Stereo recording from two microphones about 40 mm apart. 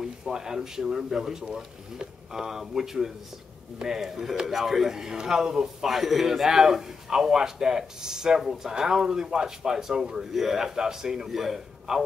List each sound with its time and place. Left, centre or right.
0.0 s a man's voice: centre
5.9 s a man's voice: centre